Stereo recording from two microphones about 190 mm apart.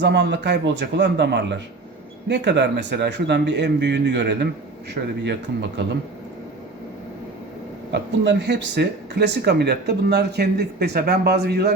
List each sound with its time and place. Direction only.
0.0 s speech: 65° right (ahead or behind)
7.9 s speech: 65° right (ahead or behind)